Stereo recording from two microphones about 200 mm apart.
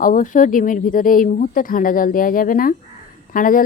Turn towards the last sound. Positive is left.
turn(degrees=45)  # may be behind; listen again after turning